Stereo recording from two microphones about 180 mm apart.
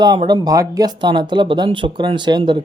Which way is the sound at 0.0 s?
20° right (ahead or behind).